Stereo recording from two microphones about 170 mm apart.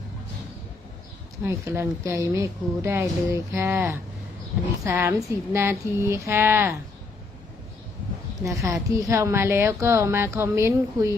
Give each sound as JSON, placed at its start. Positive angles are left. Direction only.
{"t": 1.5, "sound": "a woman's voice", "side_deg": -15}
{"t": 4.9, "sound": "a woman's voice", "side_deg": -15}
{"t": 8.4, "sound": "a woman's voice", "side_deg": -20}